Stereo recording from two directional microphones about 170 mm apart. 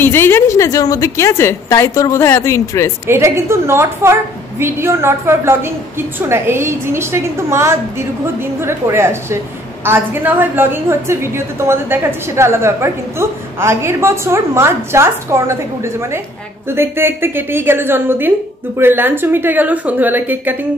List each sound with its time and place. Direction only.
0.0 s a woman's voice: 15° left (ahead or behind)
3.1 s a woman's voice: 15° right (ahead or behind)